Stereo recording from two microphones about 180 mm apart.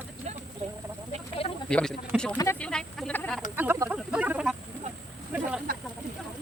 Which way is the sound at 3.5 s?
10° right (ahead or behind).